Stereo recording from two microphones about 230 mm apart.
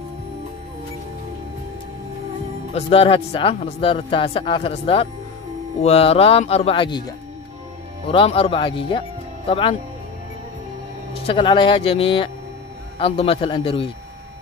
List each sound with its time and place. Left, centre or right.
2.7 s a man's voice: left
11.1 s a man's voice: left